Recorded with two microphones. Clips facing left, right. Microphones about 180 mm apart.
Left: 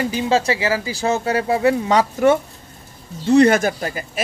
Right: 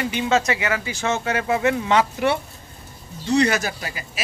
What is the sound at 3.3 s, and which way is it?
Speech, 50° left (ahead or behind).